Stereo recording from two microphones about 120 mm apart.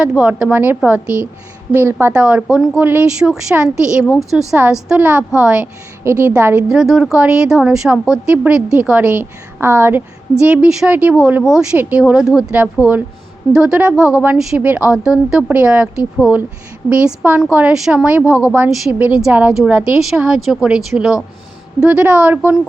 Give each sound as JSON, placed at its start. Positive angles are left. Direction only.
{"t": 0.0, "sound": "a woman's voice", "side_deg": -5}
{"t": 2.1, "sound": "speech", "side_deg": -10}
{"t": 6.1, "sound": "a woman's voice", "side_deg": -20}
{"t": 6.7, "sound": "speech", "side_deg": -5}